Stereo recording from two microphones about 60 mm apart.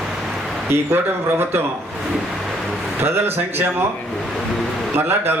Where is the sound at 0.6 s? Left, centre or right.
Right.